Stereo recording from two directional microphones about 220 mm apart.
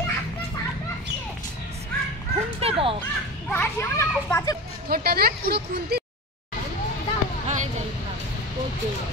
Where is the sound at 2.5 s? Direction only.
25° right (ahead or behind).